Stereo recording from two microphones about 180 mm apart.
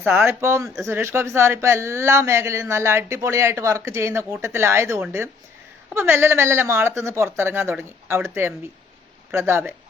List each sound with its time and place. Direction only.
0.0 s speech: 10° right (ahead or behind)